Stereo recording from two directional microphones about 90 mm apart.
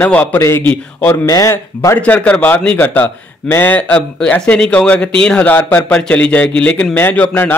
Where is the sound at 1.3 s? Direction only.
35° left (ahead or behind).